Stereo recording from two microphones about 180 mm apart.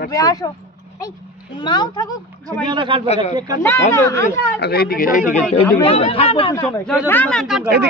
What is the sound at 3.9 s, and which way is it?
Speech, 15° left (ahead or behind).